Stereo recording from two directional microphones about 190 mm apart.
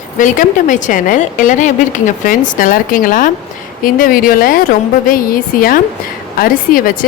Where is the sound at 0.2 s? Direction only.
40° left (ahead or behind).